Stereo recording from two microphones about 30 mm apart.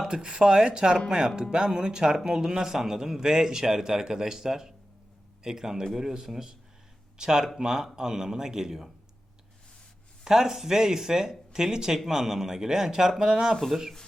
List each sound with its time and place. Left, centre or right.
0.1 s a man's voice: right
10.2 s speech: centre